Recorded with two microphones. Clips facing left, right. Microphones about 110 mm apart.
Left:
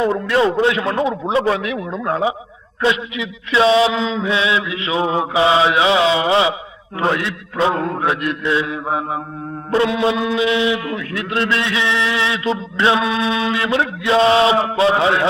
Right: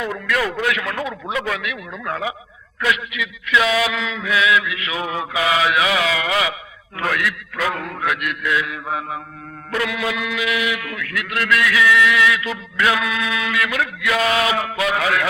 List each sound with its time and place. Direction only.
0.0 s a man's voice: 30° left (ahead or behind)